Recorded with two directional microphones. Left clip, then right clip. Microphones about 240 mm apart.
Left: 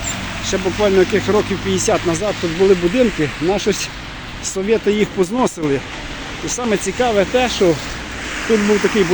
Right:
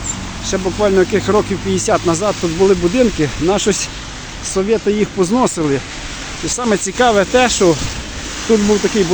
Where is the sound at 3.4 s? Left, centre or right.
Centre.